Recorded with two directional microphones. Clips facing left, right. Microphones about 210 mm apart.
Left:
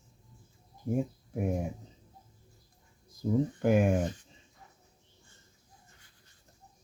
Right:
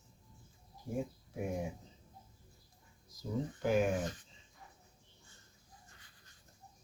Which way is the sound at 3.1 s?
50° left (ahead or behind).